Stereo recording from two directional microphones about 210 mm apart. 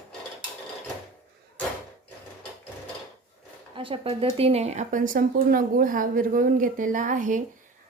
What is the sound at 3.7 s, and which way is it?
Speech, 25° right (ahead or behind).